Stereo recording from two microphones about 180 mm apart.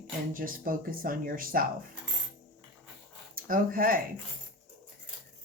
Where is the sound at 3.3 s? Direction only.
50° right (ahead or behind).